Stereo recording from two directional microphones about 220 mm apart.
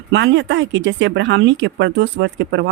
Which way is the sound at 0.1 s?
55° right (ahead or behind).